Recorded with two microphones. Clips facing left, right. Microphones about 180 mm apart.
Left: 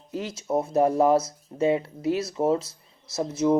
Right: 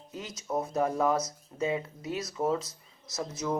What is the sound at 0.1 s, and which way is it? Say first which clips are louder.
Speech: left 7 dB; 30° left (ahead or behind).